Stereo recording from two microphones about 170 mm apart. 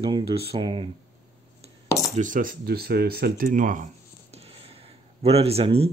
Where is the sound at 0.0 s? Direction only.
30° right (ahead or behind).